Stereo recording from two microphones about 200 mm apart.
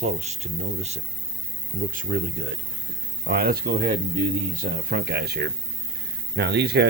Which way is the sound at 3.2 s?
50° right (ahead or behind).